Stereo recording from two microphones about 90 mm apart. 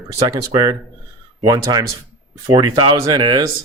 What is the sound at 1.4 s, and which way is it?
Speech, 45° right (ahead or behind).